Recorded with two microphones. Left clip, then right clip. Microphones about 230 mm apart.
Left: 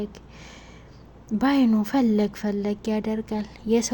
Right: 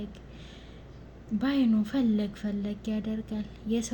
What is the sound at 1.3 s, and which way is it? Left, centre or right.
Speech, left.